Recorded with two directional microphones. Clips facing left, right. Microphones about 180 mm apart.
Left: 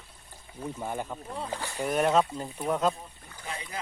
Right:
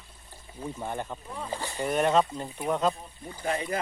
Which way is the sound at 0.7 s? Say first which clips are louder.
Even; 5° left (ahead or behind).